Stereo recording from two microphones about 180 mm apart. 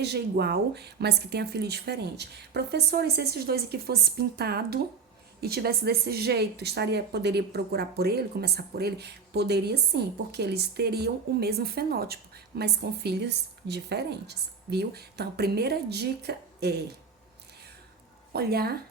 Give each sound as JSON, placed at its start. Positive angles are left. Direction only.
{"t": 0.0, "sound": "a woman's voice", "side_deg": -65}
{"t": 18.3, "sound": "a woman's voice", "side_deg": -60}